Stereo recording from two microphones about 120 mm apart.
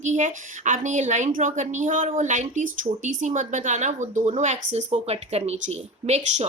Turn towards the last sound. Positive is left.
turn(degrees=-65)  # may be behind; listen again after turning